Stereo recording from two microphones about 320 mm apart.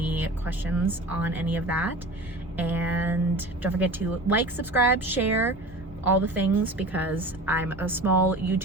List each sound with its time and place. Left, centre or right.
0.0 s a woman's voice: centre